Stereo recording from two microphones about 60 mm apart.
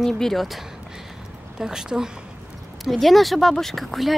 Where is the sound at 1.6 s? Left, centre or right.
Centre.